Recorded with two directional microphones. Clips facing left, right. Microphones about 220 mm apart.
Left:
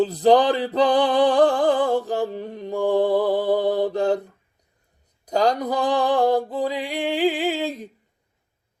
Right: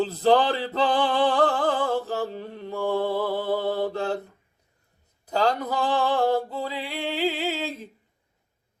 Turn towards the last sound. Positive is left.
turn(degrees=15)  # may be behind; listen again after turning